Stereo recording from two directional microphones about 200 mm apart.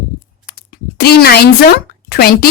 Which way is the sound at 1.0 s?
50° left (ahead or behind).